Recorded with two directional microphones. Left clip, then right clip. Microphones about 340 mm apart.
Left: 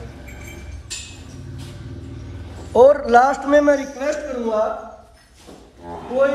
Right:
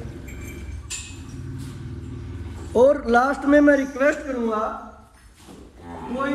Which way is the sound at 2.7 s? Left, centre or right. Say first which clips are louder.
Left 5 dB; left.